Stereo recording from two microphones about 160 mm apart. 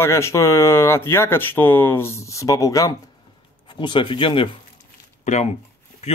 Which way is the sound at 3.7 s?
30° left (ahead or behind).